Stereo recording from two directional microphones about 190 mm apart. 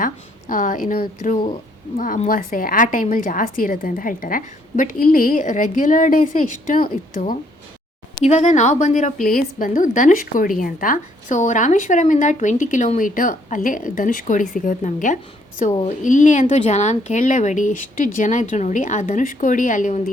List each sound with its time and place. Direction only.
0.0 s a woman's voice: 45° left (ahead or behind)